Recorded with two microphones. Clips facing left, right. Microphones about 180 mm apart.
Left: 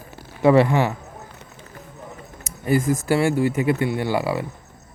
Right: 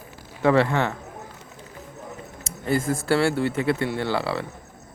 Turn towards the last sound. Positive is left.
turn(degrees=15)  # may be behind; listen again after turning